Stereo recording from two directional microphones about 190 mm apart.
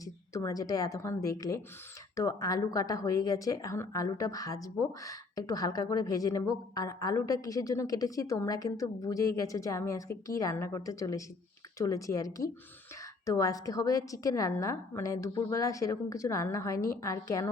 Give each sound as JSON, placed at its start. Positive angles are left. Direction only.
{"t": 0.0, "sound": "a woman's voice", "side_deg": 20}